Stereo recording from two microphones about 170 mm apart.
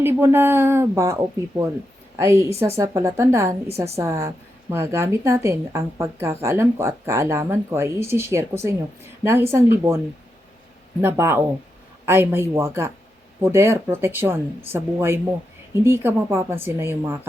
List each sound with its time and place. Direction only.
0.0 s a woman's voice: 15° right (ahead or behind)
11.0 s a woman's voice: 15° right (ahead or behind)